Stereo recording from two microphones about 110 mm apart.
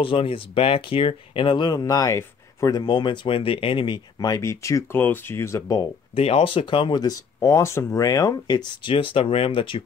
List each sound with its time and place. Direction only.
0.0 s speech: 55° left (ahead or behind); by 2.8 s 30° left (ahead or behind)
2.8 s speech: 45° left (ahead or behind)
6.1 s speech: 60° left (ahead or behind)